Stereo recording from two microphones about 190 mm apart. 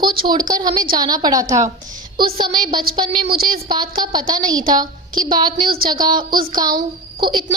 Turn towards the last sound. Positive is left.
turn(degrees=-25)  # may be behind; listen again after turning